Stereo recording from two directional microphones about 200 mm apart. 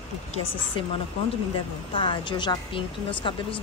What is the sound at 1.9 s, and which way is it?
A woman's voice, 25° left (ahead or behind).